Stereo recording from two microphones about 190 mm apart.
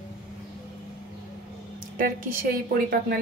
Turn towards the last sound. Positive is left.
turn(degrees=-55)  # may be behind; listen again after turning